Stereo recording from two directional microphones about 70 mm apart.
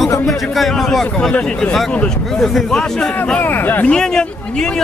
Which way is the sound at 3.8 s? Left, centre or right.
Centre.